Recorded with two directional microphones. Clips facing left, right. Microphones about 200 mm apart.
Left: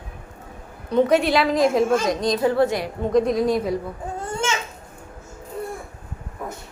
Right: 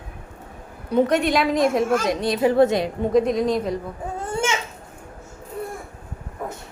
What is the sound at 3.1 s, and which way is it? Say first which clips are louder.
Speech: left 1 dB; centre (ahead or behind).